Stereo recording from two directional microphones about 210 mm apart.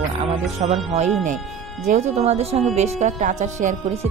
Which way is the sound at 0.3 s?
30° right (ahead or behind).